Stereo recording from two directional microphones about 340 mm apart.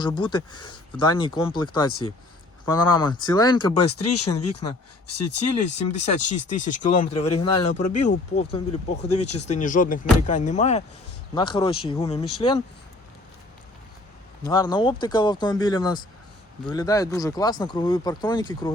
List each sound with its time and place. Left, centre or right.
0.2 s speech: centre
3.9 s speech: left
5.4 s speech: centre
9.0 s speech: left
9.5 s speech: left
14.4 s speech: centre